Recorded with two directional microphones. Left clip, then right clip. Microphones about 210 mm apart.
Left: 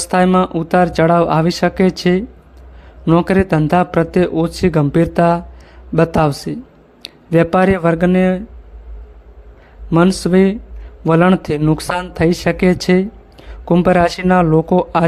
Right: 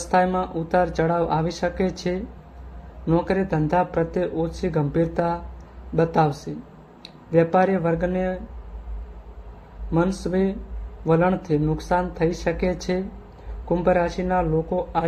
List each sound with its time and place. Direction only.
0.1 s speech: 50° left (ahead or behind)
9.9 s speech: 50° left (ahead or behind)